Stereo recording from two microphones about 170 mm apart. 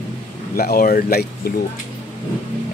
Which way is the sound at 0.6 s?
60° left (ahead or behind).